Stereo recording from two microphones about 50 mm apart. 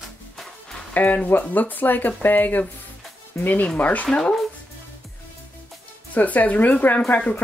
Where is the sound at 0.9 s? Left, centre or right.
Left.